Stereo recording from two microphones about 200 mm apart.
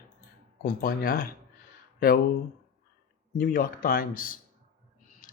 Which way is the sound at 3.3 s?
45° left (ahead or behind).